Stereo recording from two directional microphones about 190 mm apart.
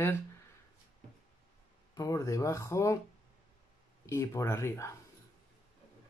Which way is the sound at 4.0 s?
15° left (ahead or behind).